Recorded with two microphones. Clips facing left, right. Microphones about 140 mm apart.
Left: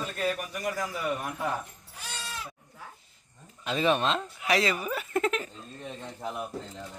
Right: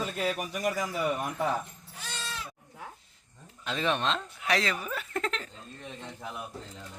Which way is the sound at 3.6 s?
5° left (ahead or behind).